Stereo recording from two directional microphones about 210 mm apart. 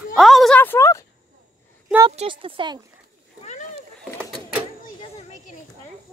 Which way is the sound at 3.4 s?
35° left (ahead or behind).